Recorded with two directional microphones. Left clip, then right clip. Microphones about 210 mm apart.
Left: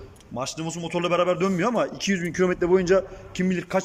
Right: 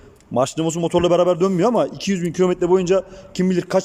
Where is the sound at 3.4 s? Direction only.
25° right (ahead or behind).